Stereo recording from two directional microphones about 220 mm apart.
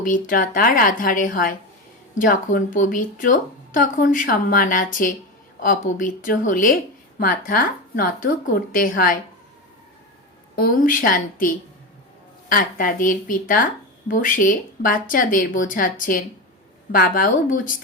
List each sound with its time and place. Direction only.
0.0 s speech: 40° left (ahead or behind)
10.5 s speech: 40° left (ahead or behind)